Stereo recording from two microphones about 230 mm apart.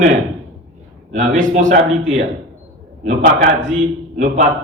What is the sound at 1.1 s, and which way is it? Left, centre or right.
A man's voice, right.